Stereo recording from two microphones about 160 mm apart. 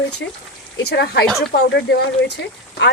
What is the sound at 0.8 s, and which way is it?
Speech, 90° left.